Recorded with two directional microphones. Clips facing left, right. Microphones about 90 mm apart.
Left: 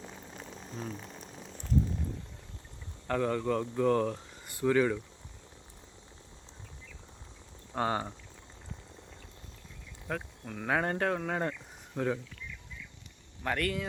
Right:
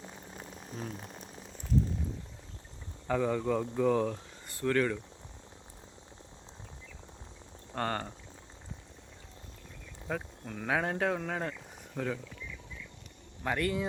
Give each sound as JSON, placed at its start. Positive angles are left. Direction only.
{"t": 0.0, "sound": "a sound", "side_deg": -15}
{"t": 0.9, "sound": "speech", "side_deg": -15}
{"t": 1.2, "sound": "rain on surface", "side_deg": -5}
{"t": 3.1, "sound": "speech", "side_deg": -5}
{"t": 7.7, "sound": "speech", "side_deg": 10}
{"t": 10.1, "sound": "speech", "side_deg": -5}
{"t": 13.4, "sound": "speech", "side_deg": -10}